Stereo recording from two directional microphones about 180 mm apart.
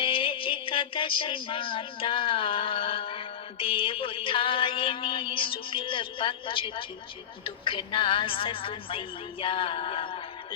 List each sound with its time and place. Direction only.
0.0 s music: 30° left (ahead or behind)